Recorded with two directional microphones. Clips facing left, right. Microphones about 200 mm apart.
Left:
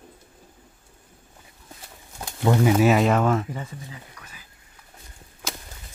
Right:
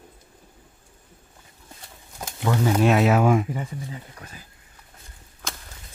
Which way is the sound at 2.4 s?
20° left (ahead or behind).